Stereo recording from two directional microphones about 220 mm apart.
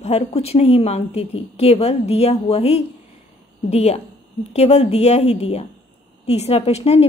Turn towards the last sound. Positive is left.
turn(degrees=25)  # may be behind; listen again after turning